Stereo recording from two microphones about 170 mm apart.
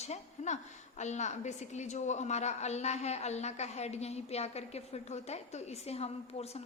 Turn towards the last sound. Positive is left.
turn(degrees=35)  # may be behind; listen again after turning